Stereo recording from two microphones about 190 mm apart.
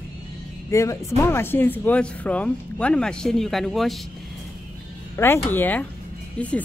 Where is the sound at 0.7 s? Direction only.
15° left (ahead or behind).